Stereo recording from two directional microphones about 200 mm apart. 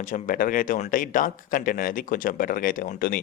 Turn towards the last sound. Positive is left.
turn(degrees=45)  # may be behind; listen again after turning